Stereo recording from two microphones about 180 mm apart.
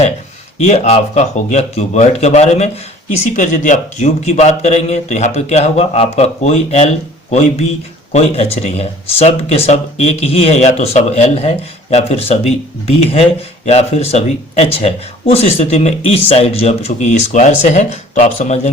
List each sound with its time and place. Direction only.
0.6 s speech: 35° left (ahead or behind)